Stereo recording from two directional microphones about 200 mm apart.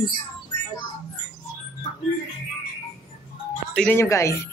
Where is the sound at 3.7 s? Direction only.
5° left (ahead or behind).